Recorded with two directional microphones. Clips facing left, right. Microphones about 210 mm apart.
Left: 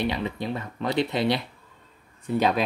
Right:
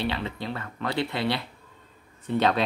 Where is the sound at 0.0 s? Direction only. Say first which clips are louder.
Left 2 dB; 15° left (ahead or behind).